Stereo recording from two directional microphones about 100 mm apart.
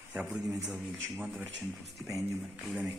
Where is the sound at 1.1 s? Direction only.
5° right (ahead or behind).